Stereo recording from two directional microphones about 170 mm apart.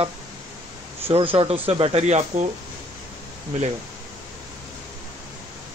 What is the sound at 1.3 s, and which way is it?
Speech, 35° right (ahead or behind).